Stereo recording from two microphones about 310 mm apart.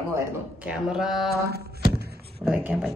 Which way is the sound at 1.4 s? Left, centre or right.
Right.